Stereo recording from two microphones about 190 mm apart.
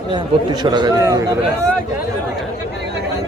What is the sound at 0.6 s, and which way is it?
A man's voice, 20° right (ahead or behind).